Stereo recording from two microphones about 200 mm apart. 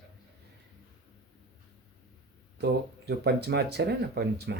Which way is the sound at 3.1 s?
55° right (ahead or behind).